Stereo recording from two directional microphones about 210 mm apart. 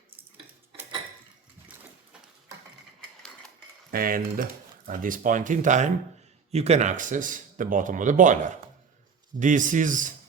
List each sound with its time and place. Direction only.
3.9 s speech: 45° right (ahead or behind)